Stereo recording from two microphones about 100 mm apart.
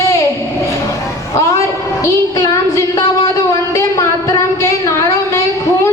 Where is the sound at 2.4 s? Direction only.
35° left (ahead or behind).